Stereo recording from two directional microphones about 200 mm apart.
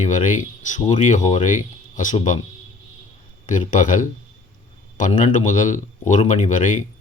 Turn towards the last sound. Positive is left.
turn(degrees=40)  # may be behind; listen again after turning